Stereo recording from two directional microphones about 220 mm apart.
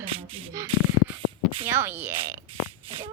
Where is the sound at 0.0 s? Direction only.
25° right (ahead or behind).